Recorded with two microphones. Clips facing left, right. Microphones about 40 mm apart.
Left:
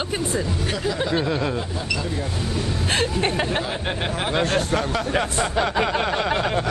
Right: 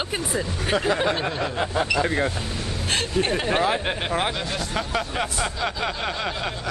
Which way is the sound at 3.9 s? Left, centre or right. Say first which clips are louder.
Right 1 dB; centre.